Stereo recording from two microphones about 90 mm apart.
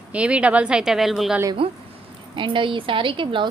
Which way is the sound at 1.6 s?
90° right.